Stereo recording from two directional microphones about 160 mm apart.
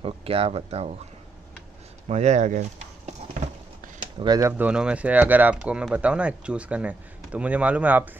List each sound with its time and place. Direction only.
0.0 s speech: 35° right (ahead or behind)
2.0 s speech: 45° right (ahead or behind)
3.1 s a sound: 45° right (ahead or behind)
4.2 s speech: 20° right (ahead or behind)